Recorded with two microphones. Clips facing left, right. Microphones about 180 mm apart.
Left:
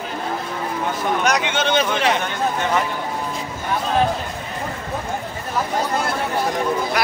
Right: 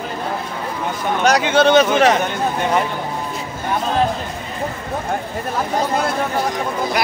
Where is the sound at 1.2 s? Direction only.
35° right (ahead or behind).